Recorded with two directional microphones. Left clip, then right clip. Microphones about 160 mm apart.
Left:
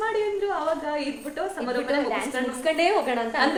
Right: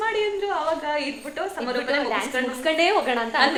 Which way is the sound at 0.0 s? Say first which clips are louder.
Right 1 dB; 20° left (ahead or behind).